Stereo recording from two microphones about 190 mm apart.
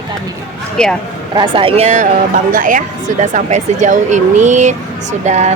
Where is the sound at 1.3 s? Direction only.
25° right (ahead or behind).